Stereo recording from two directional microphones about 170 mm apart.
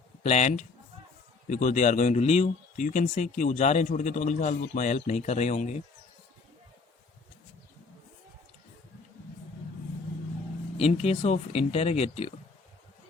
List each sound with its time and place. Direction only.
0.2 s speech: 45° left (ahead or behind)
10.8 s speech: 35° left (ahead or behind)